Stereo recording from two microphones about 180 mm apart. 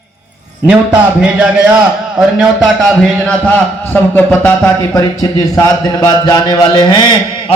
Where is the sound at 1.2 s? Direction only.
5° right (ahead or behind).